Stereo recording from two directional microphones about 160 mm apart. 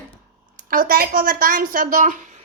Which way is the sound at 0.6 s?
60° right (ahead or behind).